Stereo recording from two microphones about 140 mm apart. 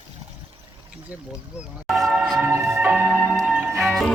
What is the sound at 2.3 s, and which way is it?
Music, 20° right (ahead or behind).